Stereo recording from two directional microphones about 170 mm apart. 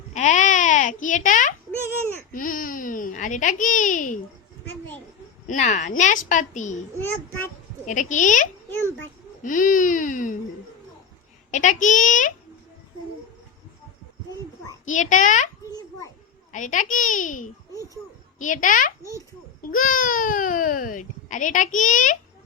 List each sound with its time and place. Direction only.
0.1 s goat: 45° left (ahead or behind)
2.3 s a child's voice: 55° left (ahead or behind)
5.5 s speech: 45° left (ahead or behind)
7.9 s speech: 45° left (ahead or behind)
11.5 s speech: 45° left (ahead or behind)
14.8 s speech: 50° left (ahead or behind)
16.5 s speech: 45° left (ahead or behind)